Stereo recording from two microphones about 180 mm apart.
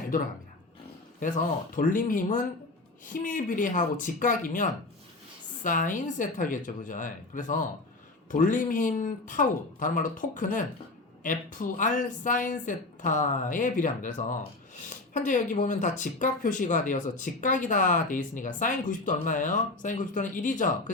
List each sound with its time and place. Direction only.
1.7 s speech: 50° left (ahead or behind)